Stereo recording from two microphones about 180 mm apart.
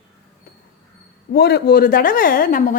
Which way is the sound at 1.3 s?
65° left (ahead or behind).